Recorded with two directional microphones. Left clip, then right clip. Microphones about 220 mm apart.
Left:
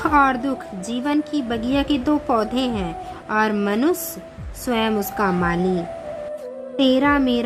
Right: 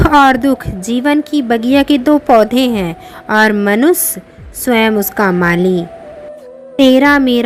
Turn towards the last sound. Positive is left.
turn(degrees=-30)  # may be behind; listen again after turning